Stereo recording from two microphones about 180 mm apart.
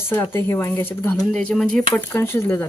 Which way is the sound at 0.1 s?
15° left (ahead or behind).